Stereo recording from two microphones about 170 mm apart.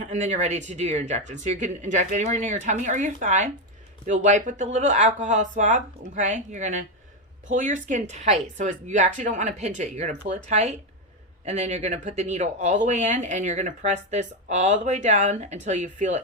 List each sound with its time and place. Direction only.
0.1 s speech: 45° right (ahead or behind)